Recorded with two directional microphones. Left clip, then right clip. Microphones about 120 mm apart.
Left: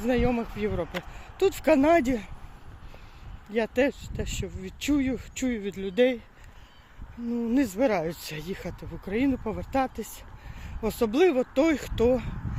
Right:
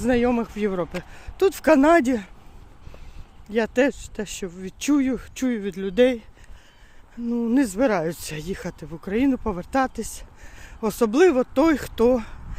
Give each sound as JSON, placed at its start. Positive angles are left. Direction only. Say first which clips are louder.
{"t": 0.1, "sound": "speech", "louder": "right 5 dB", "side_deg": -80}
{"t": 1.4, "sound": "speech", "louder": "right 5 dB", "side_deg": -70}
{"t": 3.5, "sound": "speech", "louder": "right 4 dB", "side_deg": -60}
{"t": 7.3, "sound": "speech", "louder": "right 5 dB", "side_deg": -70}
{"t": 7.5, "sound": "speech", "louder": "right 4 dB", "side_deg": -55}
{"t": 12.0, "sound": "speech", "louder": "right 4 dB", "side_deg": -70}